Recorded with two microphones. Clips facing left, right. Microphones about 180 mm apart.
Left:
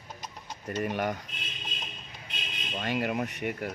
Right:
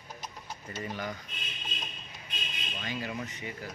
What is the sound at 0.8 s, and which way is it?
Speech, 65° left (ahead or behind).